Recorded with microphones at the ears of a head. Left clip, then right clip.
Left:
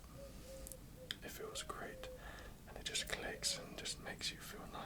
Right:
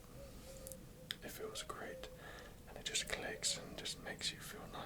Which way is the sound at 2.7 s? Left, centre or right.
Centre.